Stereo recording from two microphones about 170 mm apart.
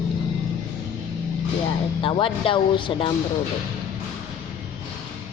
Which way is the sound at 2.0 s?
30° left (ahead or behind).